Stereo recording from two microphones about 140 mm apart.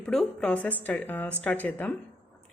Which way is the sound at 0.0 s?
Centre (ahead or behind).